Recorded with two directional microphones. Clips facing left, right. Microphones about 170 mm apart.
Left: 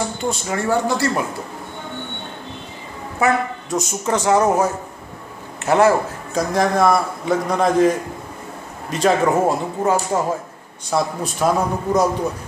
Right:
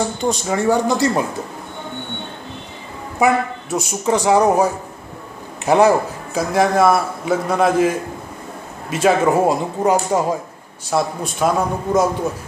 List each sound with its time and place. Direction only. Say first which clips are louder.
0.2 s speech: right 4 dB; 15° right (ahead or behind)
3.2 s speech: right 2 dB; 10° right (ahead or behind)
6.3 s a man's voice: right 2 dB; 5° right (ahead or behind)
10.9 s a man's voice: right 1 dB; centre (ahead or behind)